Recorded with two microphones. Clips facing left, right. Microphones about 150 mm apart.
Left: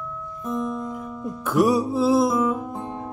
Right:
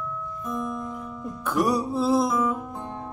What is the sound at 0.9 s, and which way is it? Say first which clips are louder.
Music: left 3 dB; 10° left (ahead or behind).